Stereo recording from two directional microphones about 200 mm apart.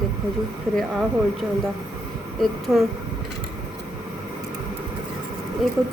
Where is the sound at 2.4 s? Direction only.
Centre (ahead or behind).